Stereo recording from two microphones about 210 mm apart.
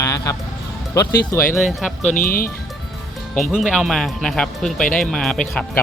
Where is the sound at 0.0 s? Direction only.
15° left (ahead or behind).